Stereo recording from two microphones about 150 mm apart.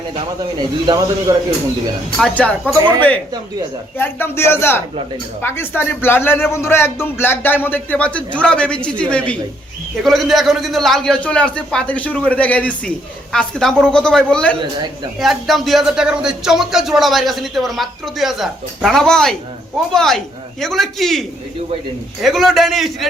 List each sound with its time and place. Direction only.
0.9 s speech: 25° right (ahead or behind)
2.1 s a man's voice: 5° left (ahead or behind)
2.7 s speech: 25° right (ahead or behind)
3.9 s a man's voice: 15° left (ahead or behind)